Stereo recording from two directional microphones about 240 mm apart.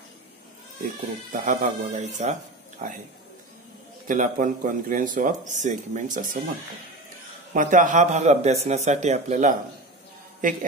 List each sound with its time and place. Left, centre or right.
1.3 s a man's voice: right
4.1 s a man's voice: right
7.5 s a man's voice: right